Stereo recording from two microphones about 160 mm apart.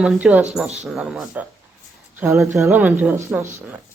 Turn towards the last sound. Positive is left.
turn(degrees=-15)  # may be behind; listen again after turning